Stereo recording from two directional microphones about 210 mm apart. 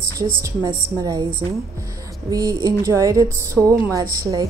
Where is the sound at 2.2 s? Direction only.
15° right (ahead or behind).